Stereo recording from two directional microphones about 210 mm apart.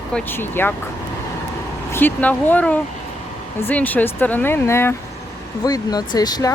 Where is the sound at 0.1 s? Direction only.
10° left (ahead or behind).